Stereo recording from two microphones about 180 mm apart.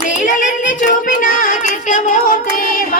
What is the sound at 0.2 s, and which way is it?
Child singing, 45° left (ahead or behind).